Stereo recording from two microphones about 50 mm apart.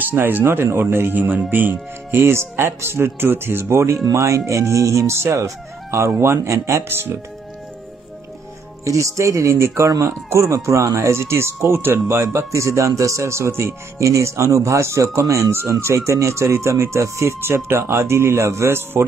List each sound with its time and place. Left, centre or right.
0.0 s a man's voice: right
6.1 s speech: right
8.8 s speech: right
17.4 s a man's voice: right